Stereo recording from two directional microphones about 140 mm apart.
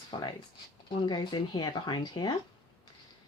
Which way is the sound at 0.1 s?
35° left (ahead or behind).